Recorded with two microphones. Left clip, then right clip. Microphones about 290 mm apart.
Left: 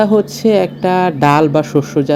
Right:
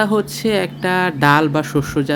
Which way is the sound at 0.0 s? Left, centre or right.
Centre.